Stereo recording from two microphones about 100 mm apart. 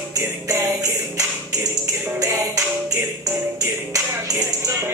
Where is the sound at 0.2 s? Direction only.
25° right (ahead or behind).